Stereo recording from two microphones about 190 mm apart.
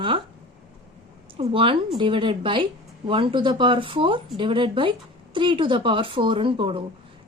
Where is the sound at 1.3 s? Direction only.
30° right (ahead or behind).